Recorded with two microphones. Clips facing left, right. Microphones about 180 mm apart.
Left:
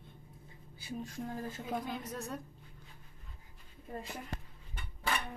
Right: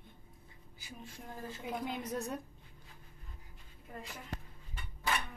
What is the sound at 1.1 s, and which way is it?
Speech, 45° left (ahead or behind).